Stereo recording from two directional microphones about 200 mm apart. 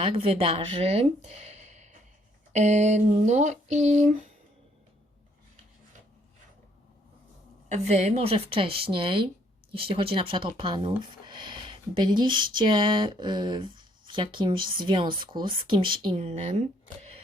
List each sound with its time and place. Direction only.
0.1 s speech: 30° right (ahead or behind)
7.7 s speech: 30° right (ahead or behind)